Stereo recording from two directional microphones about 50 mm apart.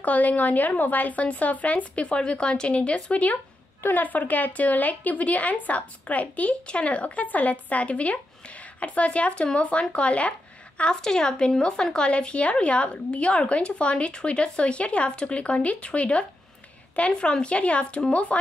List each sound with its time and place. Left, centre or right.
0.0 s speech: left
3.8 s speech: left
10.8 s speech: centre